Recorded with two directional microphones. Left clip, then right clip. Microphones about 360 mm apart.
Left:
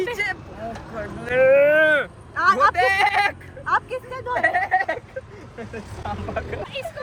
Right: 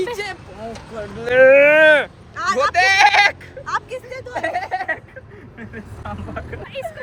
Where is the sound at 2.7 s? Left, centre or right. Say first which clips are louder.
Right 6 dB; centre.